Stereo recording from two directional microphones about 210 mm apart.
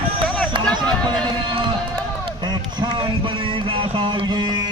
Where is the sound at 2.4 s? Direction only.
20° right (ahead or behind).